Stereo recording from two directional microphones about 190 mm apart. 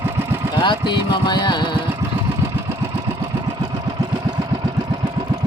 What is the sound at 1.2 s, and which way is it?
Music, 25° left (ahead or behind).